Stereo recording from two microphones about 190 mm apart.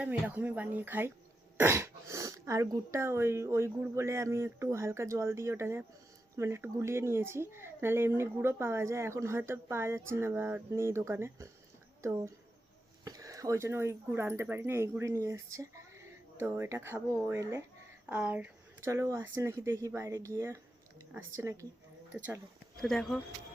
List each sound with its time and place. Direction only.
0.0 s speech: 10° right (ahead or behind)
22.8 s speech: centre (ahead or behind)